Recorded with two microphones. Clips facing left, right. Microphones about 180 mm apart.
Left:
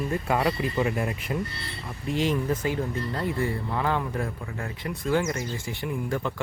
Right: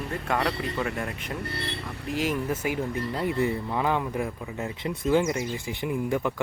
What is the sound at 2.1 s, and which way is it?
Speech, 5° right (ahead or behind).